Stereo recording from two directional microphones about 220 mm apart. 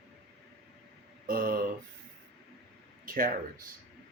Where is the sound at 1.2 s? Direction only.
40° right (ahead or behind).